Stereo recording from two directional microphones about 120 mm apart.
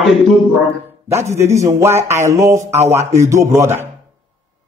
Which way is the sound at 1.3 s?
25° right (ahead or behind).